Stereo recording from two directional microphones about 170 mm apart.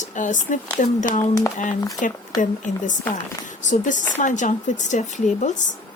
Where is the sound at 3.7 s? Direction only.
50° left (ahead or behind).